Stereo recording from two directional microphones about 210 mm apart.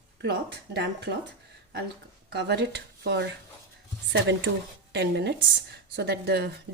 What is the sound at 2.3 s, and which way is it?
Speech, 55° right (ahead or behind).